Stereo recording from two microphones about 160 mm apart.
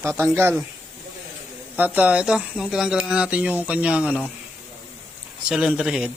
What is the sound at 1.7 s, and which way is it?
Speech, 10° right (ahead or behind).